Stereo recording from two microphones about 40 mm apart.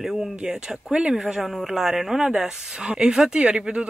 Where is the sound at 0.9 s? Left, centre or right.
Right.